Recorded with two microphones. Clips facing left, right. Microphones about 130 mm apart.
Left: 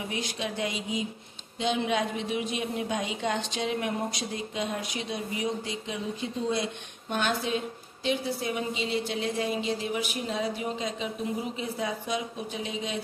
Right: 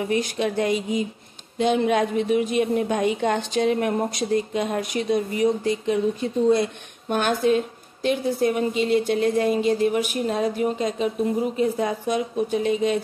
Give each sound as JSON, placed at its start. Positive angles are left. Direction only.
{"t": 0.1, "sound": "a woman's voice", "side_deg": -50}